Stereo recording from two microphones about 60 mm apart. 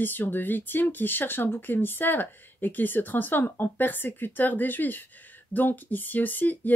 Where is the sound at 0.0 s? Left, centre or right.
Left.